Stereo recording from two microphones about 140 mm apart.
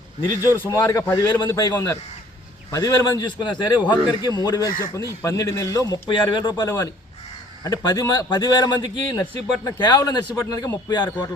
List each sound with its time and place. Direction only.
0.3 s a man's voice: 20° left (ahead or behind)
1.7 s a man's voice: 15° left (ahead or behind)